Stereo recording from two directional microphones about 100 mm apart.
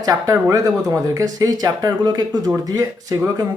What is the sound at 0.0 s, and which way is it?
Speech, 35° right (ahead or behind).